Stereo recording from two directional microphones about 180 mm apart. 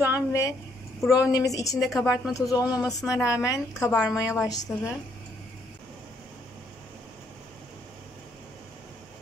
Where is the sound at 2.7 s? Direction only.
20° left (ahead or behind).